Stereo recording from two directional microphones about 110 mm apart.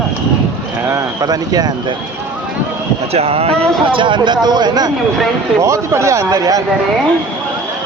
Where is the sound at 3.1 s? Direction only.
65° right (ahead or behind).